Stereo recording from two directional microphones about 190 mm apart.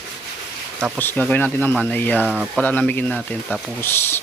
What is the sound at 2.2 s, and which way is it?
Speech, 5° right (ahead or behind).